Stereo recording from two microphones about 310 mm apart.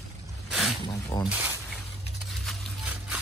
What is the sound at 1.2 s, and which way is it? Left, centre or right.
Speech, centre.